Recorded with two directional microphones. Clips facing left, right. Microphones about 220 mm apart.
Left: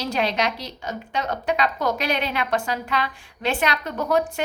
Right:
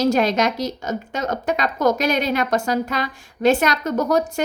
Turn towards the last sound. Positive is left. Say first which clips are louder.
# right 3 dB
turn(degrees=-40)  # may be behind; listen again after turning